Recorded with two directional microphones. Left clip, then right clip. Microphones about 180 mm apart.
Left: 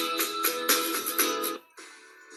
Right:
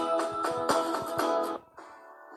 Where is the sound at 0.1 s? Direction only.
30° left (ahead or behind).